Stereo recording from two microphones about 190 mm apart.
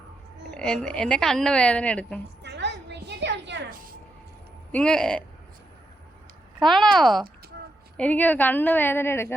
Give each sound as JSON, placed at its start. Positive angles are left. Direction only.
{"t": 0.5, "sound": "a woman's voice", "side_deg": 5}
{"t": 2.4, "sound": "a sound", "side_deg": -65}
{"t": 4.7, "sound": "a woman's voice", "side_deg": 5}
{"t": 6.6, "sound": "a woman's voice", "side_deg": 0}